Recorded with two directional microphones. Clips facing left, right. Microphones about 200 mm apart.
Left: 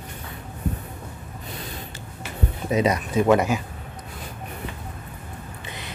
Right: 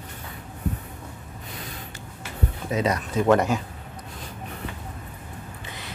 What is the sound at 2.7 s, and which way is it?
Speech, 15° left (ahead or behind).